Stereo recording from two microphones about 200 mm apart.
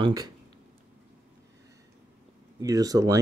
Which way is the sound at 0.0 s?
20° right (ahead or behind).